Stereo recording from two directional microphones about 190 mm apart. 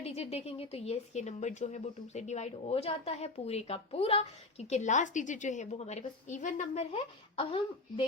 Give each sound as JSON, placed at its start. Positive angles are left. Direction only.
{"t": 0.0, "sound": "speech", "side_deg": 30}